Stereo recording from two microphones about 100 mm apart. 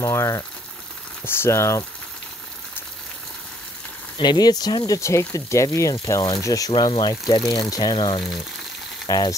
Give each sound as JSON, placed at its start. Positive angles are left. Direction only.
{"t": 0.0, "sound": "speech", "side_deg": 30}
{"t": 4.2, "sound": "speech", "side_deg": 45}
{"t": 7.0, "sound": "speech", "side_deg": 45}
{"t": 9.0, "sound": "frying", "side_deg": 40}